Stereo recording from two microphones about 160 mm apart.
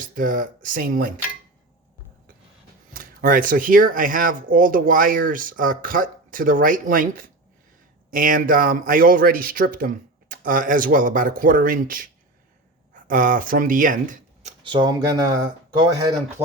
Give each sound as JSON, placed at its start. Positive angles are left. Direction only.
{"t": 0.1, "sound": "speech", "side_deg": -60}
{"t": 2.9, "sound": "speech", "side_deg": -60}
{"t": 14.6, "sound": "speech", "side_deg": -30}